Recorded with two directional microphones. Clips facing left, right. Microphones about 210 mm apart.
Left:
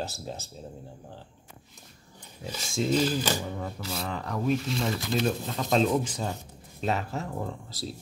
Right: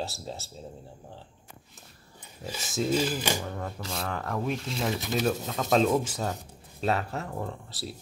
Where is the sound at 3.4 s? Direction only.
10° left (ahead or behind).